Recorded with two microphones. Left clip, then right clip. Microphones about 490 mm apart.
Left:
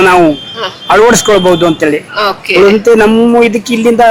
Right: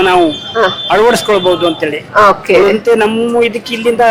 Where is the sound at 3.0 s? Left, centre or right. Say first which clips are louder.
Left 5 dB; left.